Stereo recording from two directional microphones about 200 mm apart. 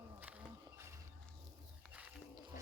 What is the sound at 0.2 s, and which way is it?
Music, 10° right (ahead or behind).